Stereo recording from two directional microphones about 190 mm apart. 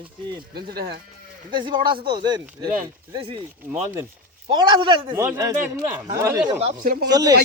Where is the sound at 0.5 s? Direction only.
55° right (ahead or behind).